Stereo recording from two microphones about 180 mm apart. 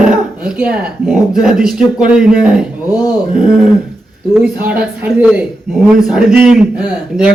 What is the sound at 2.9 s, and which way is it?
Speech, 20° left (ahead or behind).